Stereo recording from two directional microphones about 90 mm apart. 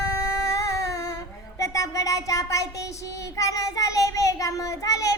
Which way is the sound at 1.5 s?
35° left (ahead or behind).